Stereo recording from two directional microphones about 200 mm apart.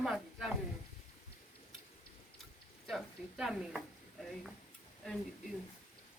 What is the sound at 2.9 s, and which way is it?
A woman's voice, centre (ahead or behind).